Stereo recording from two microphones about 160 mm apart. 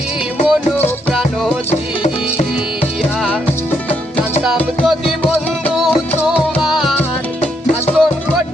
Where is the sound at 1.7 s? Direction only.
40° left (ahead or behind).